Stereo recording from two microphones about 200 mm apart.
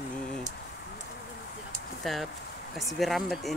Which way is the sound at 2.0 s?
Centre (ahead or behind).